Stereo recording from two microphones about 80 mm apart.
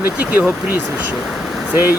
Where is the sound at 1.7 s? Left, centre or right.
Right.